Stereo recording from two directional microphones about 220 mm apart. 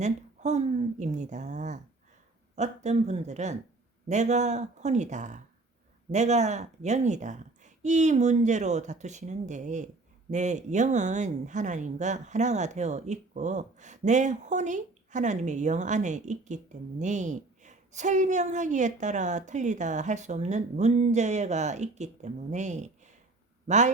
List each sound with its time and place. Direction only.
0.0 s speech: 30° right (ahead or behind)